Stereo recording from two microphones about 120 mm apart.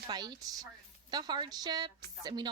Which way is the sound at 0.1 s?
35° right (ahead or behind).